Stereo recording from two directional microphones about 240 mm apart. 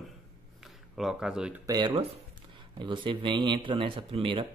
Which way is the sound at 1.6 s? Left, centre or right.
Centre.